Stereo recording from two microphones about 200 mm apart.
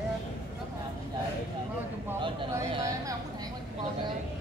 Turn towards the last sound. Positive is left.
turn(degrees=-15)  # may be behind; listen again after turning